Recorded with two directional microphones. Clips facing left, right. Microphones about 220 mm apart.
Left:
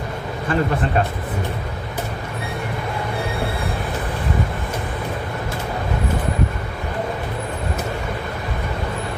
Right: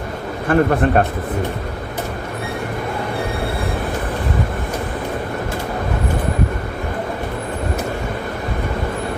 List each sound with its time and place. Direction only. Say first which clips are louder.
0.4 s a man's voice: right 6 dB; 55° right (ahead or behind)